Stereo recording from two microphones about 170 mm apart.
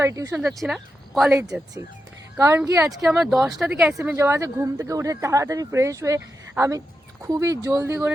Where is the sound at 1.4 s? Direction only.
20° right (ahead or behind).